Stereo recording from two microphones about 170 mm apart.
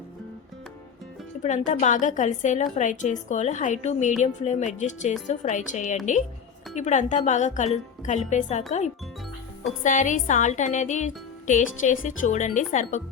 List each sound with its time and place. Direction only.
1.4 s speech: 45° left (ahead or behind)
9.8 s speech: 50° left (ahead or behind)